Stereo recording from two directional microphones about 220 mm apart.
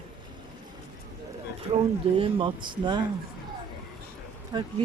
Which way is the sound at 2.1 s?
25° right (ahead or behind).